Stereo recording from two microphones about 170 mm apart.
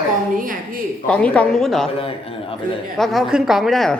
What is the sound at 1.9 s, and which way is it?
Speech, 35° left (ahead or behind).